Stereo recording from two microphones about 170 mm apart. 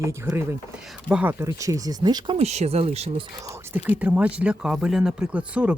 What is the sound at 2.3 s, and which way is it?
Speech, 40° right (ahead or behind).